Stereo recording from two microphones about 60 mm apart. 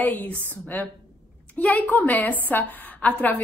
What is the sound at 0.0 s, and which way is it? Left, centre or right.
A woman's voice, left.